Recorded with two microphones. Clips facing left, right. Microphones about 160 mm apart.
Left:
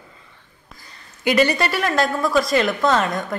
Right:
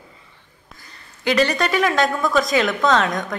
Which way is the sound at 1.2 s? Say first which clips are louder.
Left 1 dB; 10° left (ahead or behind).